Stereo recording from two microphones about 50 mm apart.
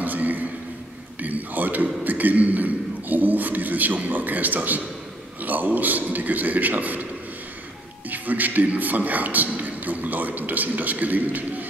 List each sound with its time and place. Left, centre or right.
0.0 s a sound: right
1.2 s a man's voice: right
8.1 s a man's voice: right